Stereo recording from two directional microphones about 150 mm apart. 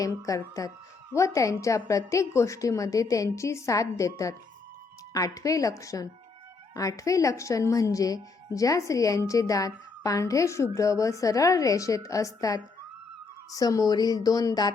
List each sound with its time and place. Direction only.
0.0 s a woman's voice: 20° left (ahead or behind)